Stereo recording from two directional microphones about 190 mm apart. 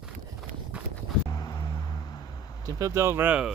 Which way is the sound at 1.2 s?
20° left (ahead or behind).